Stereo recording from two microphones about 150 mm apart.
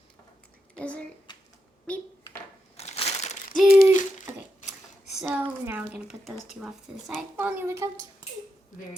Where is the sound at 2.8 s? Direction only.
45° left (ahead or behind).